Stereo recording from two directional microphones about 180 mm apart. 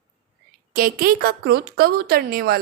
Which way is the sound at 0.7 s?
55° right (ahead or behind).